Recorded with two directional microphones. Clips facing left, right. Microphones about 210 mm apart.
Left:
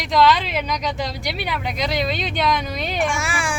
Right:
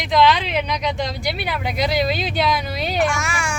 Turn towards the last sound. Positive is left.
turn(degrees=30)  # may be behind; listen again after turning